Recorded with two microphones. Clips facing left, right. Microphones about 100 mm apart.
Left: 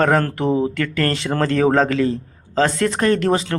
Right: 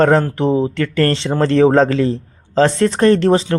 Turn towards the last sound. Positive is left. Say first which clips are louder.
# right 5 dB
turn(degrees=-25)  # may be behind; listen again after turning